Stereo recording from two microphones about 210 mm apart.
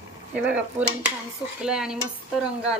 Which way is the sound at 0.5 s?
5° right (ahead or behind).